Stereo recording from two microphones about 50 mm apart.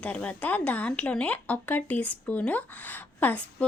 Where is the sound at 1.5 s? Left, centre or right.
Left.